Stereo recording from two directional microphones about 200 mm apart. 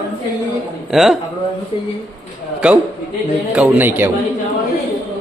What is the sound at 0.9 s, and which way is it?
Speech, centre (ahead or behind).